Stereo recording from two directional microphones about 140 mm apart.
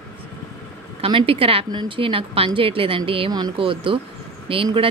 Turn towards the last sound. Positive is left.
turn(degrees=-40)  # may be behind; listen again after turning